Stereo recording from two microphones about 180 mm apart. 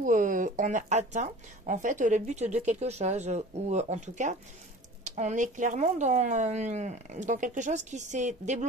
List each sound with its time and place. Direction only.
0.0 s speech: 45° right (ahead or behind)